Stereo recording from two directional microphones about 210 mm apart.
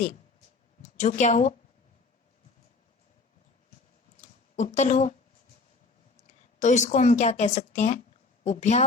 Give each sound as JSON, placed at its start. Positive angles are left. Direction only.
{"t": 0.8, "sound": "a woman's voice", "side_deg": 35}
{"t": 4.2, "sound": "a sound", "side_deg": 35}
{"t": 6.6, "sound": "a woman's voice", "side_deg": 35}